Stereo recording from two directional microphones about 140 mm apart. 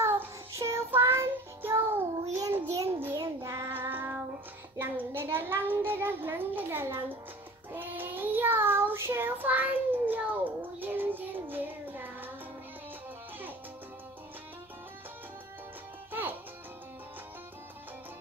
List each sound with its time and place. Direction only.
0.0 s child singing: 20° right (ahead or behind)
4.7 s a child's voice: 15° right (ahead or behind)
7.7 s child singing: 15° right (ahead or behind)
16.1 s music: 15° right (ahead or behind)